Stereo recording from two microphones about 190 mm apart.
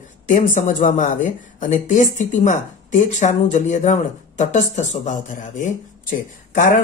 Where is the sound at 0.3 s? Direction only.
40° left (ahead or behind).